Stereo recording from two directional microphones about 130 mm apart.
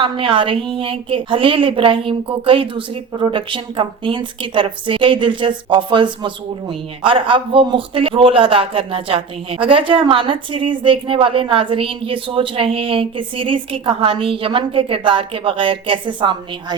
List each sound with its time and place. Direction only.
0.0 s a woman's voice: 40° right (ahead or behind)